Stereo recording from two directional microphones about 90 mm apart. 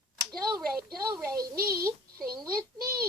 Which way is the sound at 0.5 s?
40° right (ahead or behind).